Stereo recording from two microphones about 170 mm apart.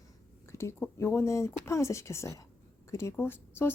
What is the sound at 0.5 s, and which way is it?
A woman's voice, 15° left (ahead or behind).